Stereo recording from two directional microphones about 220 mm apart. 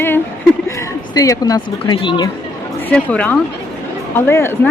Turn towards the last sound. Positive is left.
turn(degrees=10)  # may be behind; listen again after turning